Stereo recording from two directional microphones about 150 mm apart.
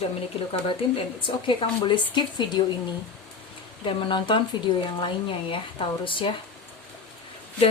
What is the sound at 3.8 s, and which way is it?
Speech, 35° left (ahead or behind).